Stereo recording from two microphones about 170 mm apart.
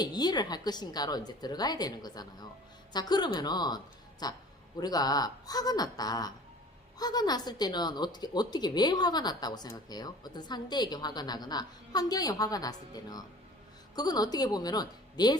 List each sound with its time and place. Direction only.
0.0 s speech: 25° left (ahead or behind)